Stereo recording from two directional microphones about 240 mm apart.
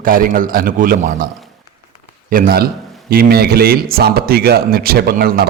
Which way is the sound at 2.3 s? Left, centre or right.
Right.